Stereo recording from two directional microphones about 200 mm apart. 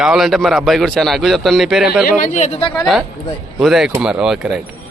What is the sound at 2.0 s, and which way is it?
Speech, 40° left (ahead or behind).